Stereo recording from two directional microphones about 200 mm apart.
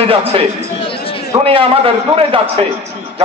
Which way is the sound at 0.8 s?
25° left (ahead or behind).